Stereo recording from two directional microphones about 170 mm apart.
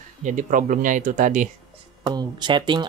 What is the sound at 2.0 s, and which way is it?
Speech, 25° right (ahead or behind).